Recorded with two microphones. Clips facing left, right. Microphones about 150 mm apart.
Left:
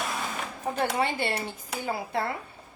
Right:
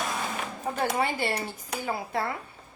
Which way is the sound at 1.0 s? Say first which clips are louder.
Even; 25° left (ahead or behind).